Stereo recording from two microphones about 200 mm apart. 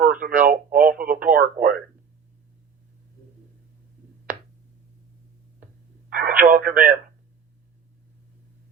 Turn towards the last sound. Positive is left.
turn(degrees=-45)  # may be behind; listen again after turning